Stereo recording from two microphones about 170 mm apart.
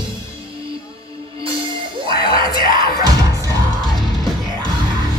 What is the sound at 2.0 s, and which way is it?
Music, 30° right (ahead or behind).